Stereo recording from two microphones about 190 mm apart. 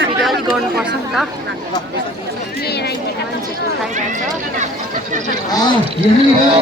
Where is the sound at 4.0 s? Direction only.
40° right (ahead or behind).